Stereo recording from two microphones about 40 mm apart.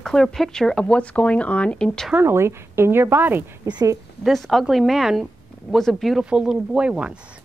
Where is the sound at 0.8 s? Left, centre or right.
Left.